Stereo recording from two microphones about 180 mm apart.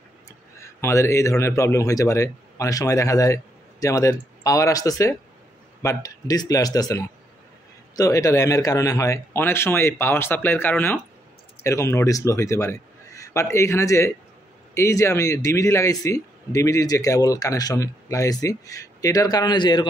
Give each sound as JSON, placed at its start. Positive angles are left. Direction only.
{"t": 0.6, "sound": "a man's voice", "side_deg": 15}